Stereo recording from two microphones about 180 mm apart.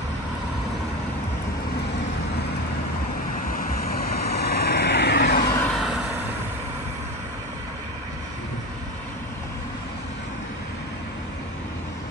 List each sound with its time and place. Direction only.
3.5 s vehicle: 55° left (ahead or behind)
5.7 s vehicle: centre (ahead or behind)